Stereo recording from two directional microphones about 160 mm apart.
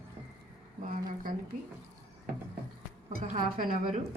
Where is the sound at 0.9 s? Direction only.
60° right (ahead or behind).